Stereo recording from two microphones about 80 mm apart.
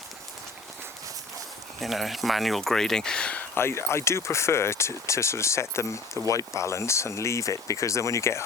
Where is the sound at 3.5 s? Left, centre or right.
Left.